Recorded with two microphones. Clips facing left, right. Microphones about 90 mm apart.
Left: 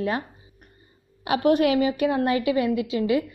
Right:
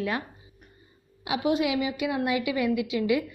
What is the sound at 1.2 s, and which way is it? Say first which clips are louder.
Speech: left 6 dB; 55° left (ahead or behind).